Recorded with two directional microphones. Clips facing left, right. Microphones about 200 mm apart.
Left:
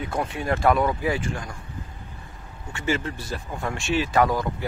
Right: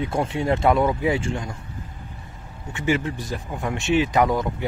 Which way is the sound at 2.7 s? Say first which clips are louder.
Right 3 dB; 15° right (ahead or behind).